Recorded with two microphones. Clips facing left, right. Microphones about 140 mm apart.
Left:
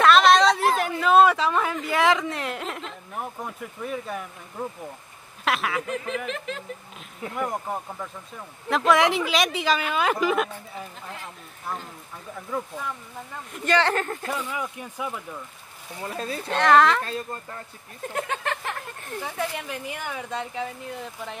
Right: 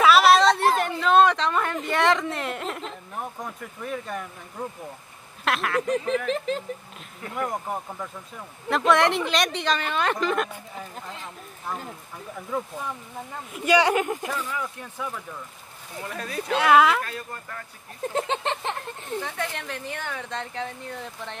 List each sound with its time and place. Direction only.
0.0 s a sound: 5° right (ahead or behind)
4.6 s speech: 5° left (ahead or behind)
5.9 s speech: 35° right (ahead or behind)
7.3 s speech: centre (ahead or behind)
13.5 s speech: 10° right (ahead or behind)
14.3 s speech: 10° left (ahead or behind)
16.0 s speech: 30° left (ahead or behind)
16.5 s speech: 5° right (ahead or behind)
17.0 s speech: 25° left (ahead or behind)
18.1 s speech: 25° right (ahead or behind)
19.2 s speech: 5° left (ahead or behind)